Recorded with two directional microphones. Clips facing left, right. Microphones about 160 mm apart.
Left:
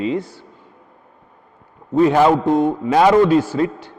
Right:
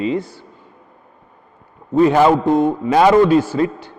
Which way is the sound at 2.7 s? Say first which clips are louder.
Right 1 dB; 25° right (ahead or behind).